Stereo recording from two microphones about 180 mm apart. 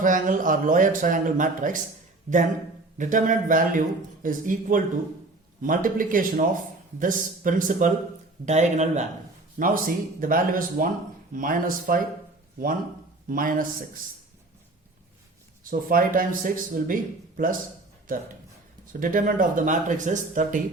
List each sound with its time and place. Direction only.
0.0 s speech: 45° right (ahead or behind)
3.0 s speech: 45° right (ahead or behind)
13.3 s speech: 50° right (ahead or behind)
15.7 s speech: 50° right (ahead or behind)
18.9 s speech: 50° right (ahead or behind)